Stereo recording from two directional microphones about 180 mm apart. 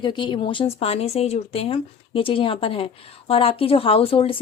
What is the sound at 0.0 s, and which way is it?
A woman's voice, 25° left (ahead or behind).